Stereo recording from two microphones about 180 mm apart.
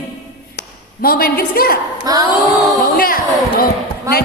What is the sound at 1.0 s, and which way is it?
Speech, 55° left (ahead or behind).